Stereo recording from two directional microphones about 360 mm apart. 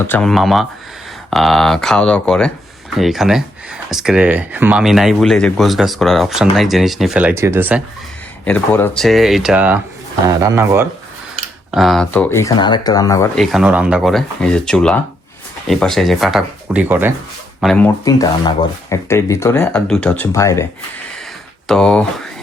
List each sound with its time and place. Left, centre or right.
0.0 s speech: centre
8.4 s speech: centre
21.7 s speech: centre